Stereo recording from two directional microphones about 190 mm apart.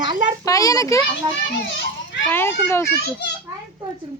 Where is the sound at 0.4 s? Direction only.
15° left (ahead or behind).